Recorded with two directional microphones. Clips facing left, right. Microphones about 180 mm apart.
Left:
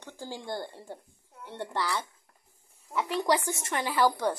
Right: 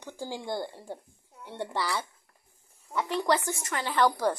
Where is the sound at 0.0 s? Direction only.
10° right (ahead or behind).